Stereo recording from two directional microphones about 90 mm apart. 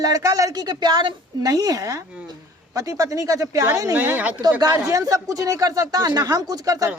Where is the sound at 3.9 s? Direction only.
20° right (ahead or behind).